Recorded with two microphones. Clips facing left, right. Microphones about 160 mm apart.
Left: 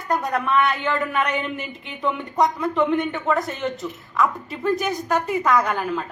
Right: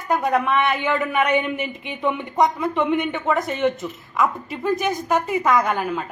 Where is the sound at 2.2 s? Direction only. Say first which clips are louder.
Even; centre (ahead or behind).